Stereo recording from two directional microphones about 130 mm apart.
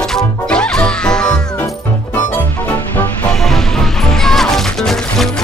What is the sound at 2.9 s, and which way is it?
Music, 15° left (ahead or behind).